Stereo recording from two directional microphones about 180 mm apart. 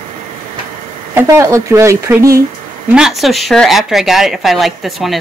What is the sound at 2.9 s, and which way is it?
Speech, 5° right (ahead or behind).